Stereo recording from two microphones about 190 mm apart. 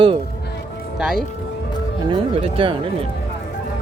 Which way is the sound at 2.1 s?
30° right (ahead or behind).